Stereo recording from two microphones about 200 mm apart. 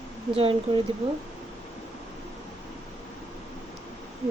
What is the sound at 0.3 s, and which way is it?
Speech, 25° right (ahead or behind).